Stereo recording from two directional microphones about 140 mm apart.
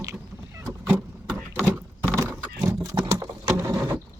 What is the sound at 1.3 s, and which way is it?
Vehicle, 10° left (ahead or behind).